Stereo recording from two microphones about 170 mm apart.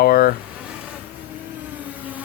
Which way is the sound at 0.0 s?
65° left (ahead or behind).